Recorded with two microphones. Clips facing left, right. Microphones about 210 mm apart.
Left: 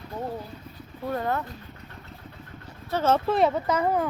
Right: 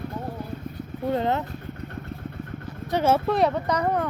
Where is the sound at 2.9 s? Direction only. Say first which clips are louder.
Right 2 dB; 15° right (ahead or behind).